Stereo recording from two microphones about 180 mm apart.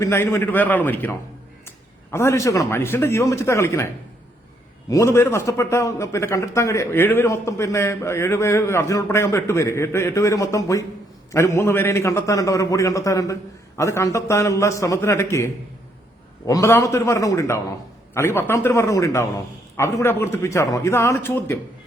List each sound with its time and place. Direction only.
0.0 s a man's voice: 15° left (ahead or behind)
16.5 s a man's voice: 15° left (ahead or behind)